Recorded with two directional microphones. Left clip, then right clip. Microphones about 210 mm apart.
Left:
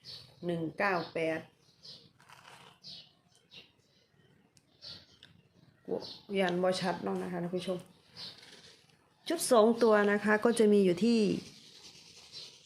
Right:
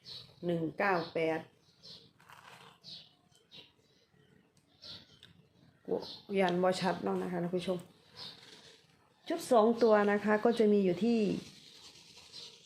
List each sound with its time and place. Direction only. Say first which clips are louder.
0.4 s speech: even; 5° right (ahead or behind)
2.3 s dog: right 1 dB; 15° left (ahead or behind)
5.9 s speech: right 1 dB; 5° right (ahead or behind)
9.2 s a woman's voice: left 2 dB; 15° left (ahead or behind)